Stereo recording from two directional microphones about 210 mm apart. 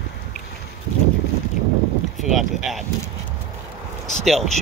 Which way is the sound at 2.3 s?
Centre (ahead or behind).